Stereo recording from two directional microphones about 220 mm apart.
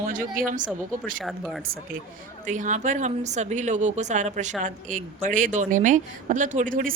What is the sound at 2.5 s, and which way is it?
Speech, 35° right (ahead or behind).